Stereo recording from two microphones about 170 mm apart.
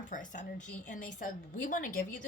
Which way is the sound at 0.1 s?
50° left (ahead or behind).